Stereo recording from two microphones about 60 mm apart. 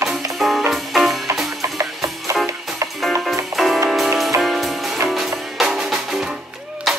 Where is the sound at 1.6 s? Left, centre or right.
Right.